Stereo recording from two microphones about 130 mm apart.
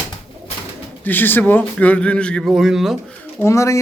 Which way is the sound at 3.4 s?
25° left (ahead or behind).